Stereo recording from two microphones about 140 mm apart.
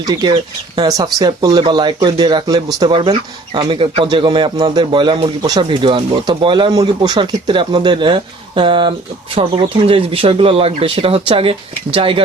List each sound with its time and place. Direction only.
0.0 s speech: 30° right (ahead or behind)